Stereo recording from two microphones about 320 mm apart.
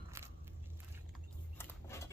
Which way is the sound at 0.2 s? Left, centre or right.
Centre.